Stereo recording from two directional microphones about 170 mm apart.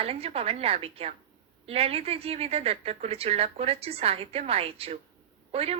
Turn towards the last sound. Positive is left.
turn(degrees=-35)  # may be behind; listen again after turning